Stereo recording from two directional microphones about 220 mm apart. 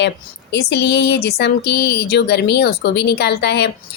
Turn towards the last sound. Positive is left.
turn(degrees=50)  # may be behind; listen again after turning